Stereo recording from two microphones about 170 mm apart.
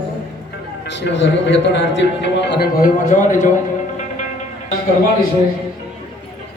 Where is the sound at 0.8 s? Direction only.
90° left; by 3.5 s 45° left (ahead or behind).